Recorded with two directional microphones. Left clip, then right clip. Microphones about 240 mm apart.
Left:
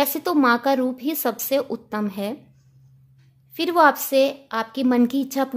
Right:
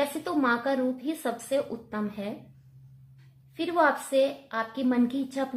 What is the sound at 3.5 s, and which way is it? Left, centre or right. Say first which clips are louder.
Speech: left 7 dB; left.